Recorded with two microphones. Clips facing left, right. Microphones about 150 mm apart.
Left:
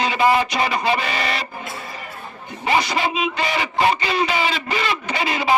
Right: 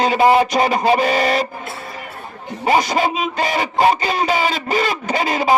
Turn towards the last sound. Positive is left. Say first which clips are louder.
# right 3 dB
turn(degrees=-45)  # may be behind; listen again after turning